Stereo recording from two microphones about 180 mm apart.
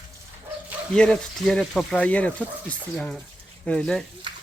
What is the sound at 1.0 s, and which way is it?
Speech, 5° left (ahead or behind).